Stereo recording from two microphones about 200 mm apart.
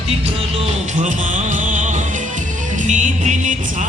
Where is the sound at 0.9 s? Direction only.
40° right (ahead or behind).